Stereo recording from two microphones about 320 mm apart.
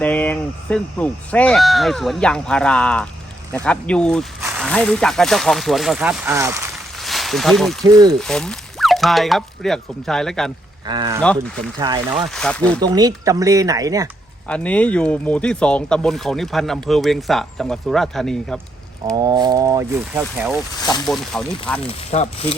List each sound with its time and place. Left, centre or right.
0.0 s speech: centre
7.9 s speech: centre
8.2 s speech: centre
10.8 s speech: centre
11.2 s speech: centre
12.8 s speech: centre
14.4 s speech: centre
19.1 s speech: centre
20.8 s speech: centre
21.3 s speech: centre
21.8 s speech: centre